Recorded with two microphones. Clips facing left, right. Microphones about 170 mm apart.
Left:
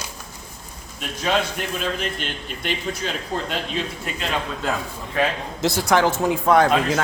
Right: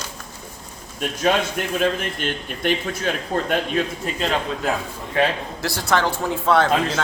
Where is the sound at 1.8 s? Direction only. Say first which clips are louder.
Right 6 dB; 50° right (ahead or behind).